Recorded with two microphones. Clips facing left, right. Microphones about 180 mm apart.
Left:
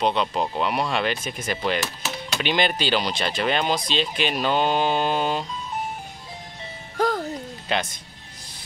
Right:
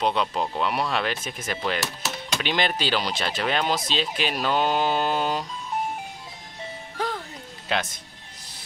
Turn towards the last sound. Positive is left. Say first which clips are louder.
# left 1 dB
turn(degrees=0)  # may be behind; listen again after turning